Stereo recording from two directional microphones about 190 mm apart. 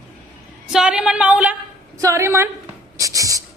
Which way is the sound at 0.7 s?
5° right (ahead or behind).